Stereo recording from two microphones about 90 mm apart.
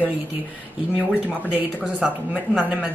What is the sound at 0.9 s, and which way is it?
Speech, 15° right (ahead or behind).